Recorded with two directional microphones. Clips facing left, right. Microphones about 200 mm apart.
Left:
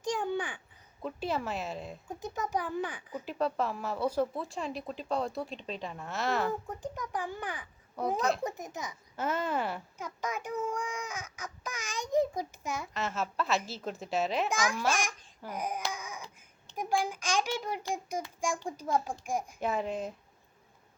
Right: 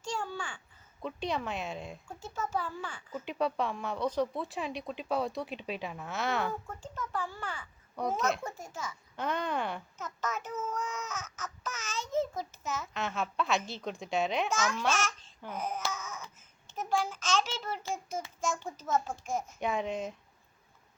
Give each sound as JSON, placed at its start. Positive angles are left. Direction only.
{"t": 0.0, "sound": "babbling", "side_deg": 15}
{"t": 1.0, "sound": "a woman's voice", "side_deg": 5}
{"t": 2.0, "sound": "a child's voice", "side_deg": 15}
{"t": 3.2, "sound": "a woman's voice", "side_deg": 0}
{"t": 6.5, "sound": "a child's voice", "side_deg": 15}
{"t": 7.9, "sound": "a woman's voice", "side_deg": 0}
{"t": 8.4, "sound": "a child's voice", "side_deg": 20}
{"t": 9.1, "sound": "a child's voice", "side_deg": 5}
{"t": 12.9, "sound": "a woman's voice", "side_deg": 0}
{"t": 14.5, "sound": "a child's voice", "side_deg": 15}
{"t": 14.9, "sound": "babbling", "side_deg": 15}
{"t": 16.7, "sound": "a child's voice", "side_deg": 15}